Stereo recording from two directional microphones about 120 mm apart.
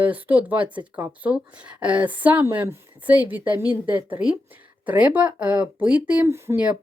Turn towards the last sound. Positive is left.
turn(degrees=-20)  # may be behind; listen again after turning